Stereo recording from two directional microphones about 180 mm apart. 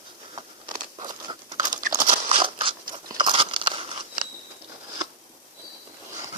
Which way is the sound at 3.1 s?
25° right (ahead or behind).